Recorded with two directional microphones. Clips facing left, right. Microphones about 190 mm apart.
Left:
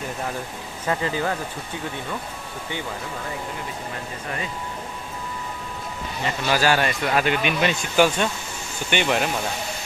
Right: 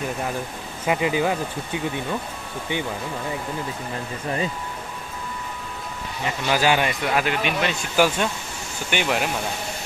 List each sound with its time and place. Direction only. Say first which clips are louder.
0.8 s a man's voice: right 3 dB; 15° right (ahead or behind)
6.2 s a man's voice: even; 15° right (ahead or behind)
7.1 s speech: left 3 dB; 5° right (ahead or behind)